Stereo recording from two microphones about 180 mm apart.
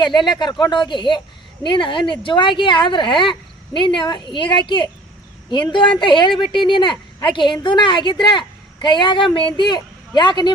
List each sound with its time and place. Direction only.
0.0 s a woman's voice: 25° left (ahead or behind)